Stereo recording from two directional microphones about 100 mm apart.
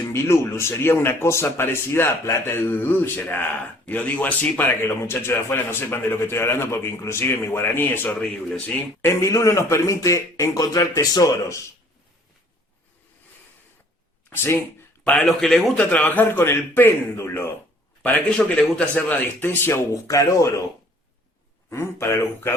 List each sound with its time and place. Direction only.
0.1 s a man's voice: 25° left (ahead or behind); by 8.8 s 10° left (ahead or behind)
9.0 s speech: 25° left (ahead or behind)
14.3 s speech: 25° left (ahead or behind)
15.2 s a man's voice: centre (ahead or behind); by 17.5 s 25° left (ahead or behind)
18.0 s speech: 10° left (ahead or behind); by 20.5 s 30° left (ahead or behind)
21.7 s speech: 25° left (ahead or behind)